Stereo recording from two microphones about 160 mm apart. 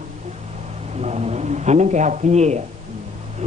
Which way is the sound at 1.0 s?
45° right (ahead or behind).